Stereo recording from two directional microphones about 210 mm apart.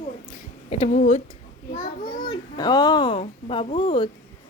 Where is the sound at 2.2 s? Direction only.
20° left (ahead or behind).